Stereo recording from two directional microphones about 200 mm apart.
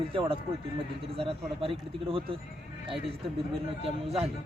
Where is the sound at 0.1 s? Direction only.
25° right (ahead or behind).